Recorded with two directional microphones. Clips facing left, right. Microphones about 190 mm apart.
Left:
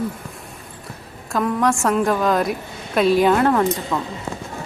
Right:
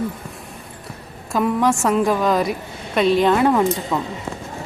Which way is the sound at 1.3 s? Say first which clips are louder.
Right 1 dB; centre (ahead or behind).